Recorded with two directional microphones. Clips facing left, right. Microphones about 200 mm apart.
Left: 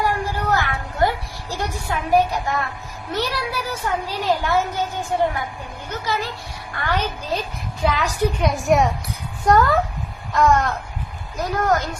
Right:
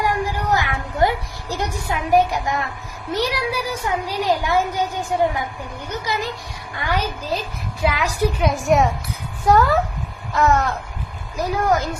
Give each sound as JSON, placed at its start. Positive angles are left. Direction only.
{"t": 0.0, "sound": "music", "side_deg": -15}
{"t": 3.1, "sound": "a child's voice", "side_deg": -15}
{"t": 5.9, "sound": "a child's voice", "side_deg": -15}